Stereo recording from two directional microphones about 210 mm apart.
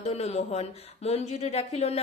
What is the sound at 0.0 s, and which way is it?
A woman's voice, 30° left (ahead or behind).